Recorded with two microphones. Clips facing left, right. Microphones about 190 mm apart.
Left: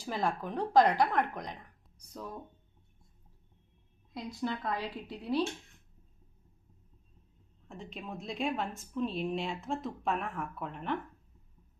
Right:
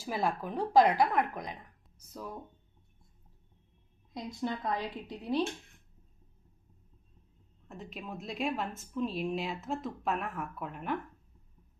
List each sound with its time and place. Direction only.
0.0 s speech: 10° right (ahead or behind)
4.1 s a woman's voice: 20° right (ahead or behind)
7.7 s a woman's voice: 5° right (ahead or behind)